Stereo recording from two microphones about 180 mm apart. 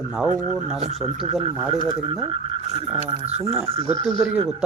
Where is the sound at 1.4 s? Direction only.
30° right (ahead or behind).